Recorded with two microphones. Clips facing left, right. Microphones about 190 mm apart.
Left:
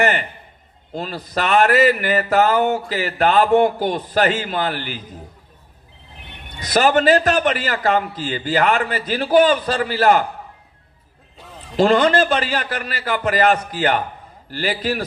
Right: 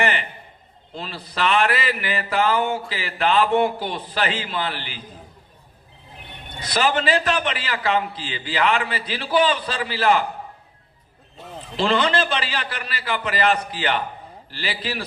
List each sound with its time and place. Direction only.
0.0 s a man's voice: 45° left (ahead or behind)
6.6 s speech: 45° left (ahead or behind)
11.8 s speech: 45° left (ahead or behind)